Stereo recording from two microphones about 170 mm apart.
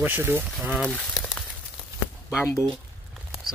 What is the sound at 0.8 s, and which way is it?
Speech, 5° left (ahead or behind).